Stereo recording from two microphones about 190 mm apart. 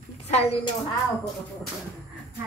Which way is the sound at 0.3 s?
35° left (ahead or behind).